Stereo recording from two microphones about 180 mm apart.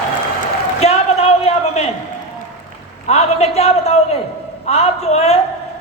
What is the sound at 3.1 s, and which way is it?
A woman's voice, 35° left (ahead or behind).